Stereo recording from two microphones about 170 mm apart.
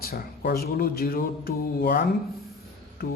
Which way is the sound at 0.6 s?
60° left (ahead or behind).